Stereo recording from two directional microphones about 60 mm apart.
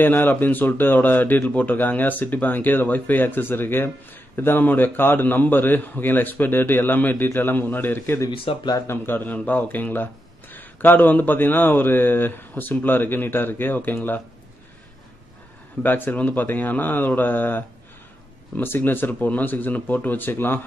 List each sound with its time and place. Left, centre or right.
0.0 s speech: left
8.2 s speech: left
8.8 s speech: left
15.8 s speech: left